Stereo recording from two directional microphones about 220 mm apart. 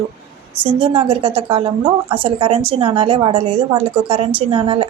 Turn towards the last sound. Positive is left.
turn(degrees=-25)  # may be behind; listen again after turning